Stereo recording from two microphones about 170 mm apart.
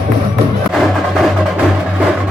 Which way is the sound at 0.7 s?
Centre (ahead or behind).